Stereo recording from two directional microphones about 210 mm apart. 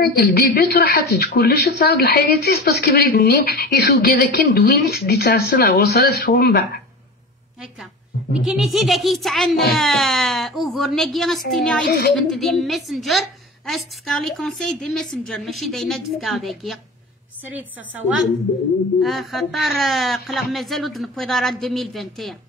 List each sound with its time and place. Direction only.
0.0 s a woman's voice: 50° left (ahead or behind)
8.5 s a woman's voice: centre (ahead or behind)